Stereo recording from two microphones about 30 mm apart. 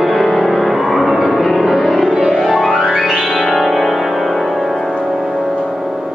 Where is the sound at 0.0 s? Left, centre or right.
Centre.